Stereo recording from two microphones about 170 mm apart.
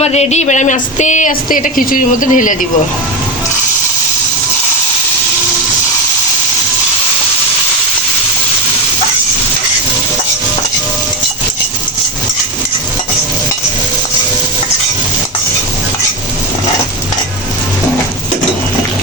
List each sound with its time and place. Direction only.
0.0 s speech: 40° left (ahead or behind)